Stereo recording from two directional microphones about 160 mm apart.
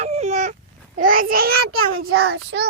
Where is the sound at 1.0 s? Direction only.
60° right (ahead or behind).